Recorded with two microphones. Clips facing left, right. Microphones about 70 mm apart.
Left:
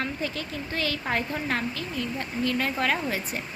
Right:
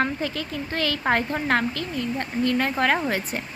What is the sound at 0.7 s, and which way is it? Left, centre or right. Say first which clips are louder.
A woman's voice: right 6 dB; right.